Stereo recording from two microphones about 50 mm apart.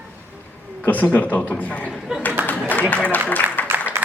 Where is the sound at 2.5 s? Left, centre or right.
Left.